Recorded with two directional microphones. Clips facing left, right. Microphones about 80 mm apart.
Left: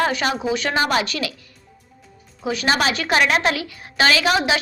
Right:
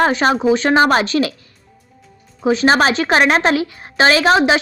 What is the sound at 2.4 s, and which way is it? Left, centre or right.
A woman's voice, right.